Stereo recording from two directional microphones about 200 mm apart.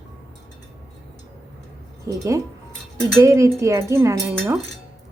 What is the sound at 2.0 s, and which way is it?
A woman's voice, 15° right (ahead or behind).